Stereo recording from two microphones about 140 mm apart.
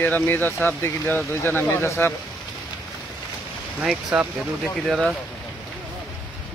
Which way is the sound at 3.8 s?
5° right (ahead or behind).